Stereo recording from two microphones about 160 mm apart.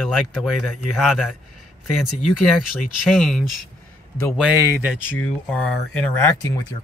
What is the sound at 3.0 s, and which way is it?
Speech, centre (ahead or behind).